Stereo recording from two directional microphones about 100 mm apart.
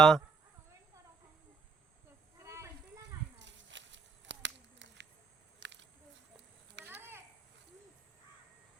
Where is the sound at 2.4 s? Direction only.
30° right (ahead or behind).